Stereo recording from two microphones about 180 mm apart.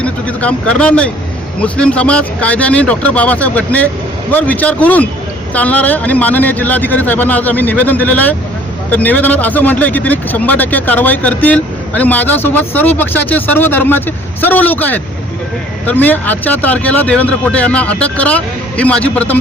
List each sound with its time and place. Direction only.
0.0 s speech: 5° left (ahead or behind)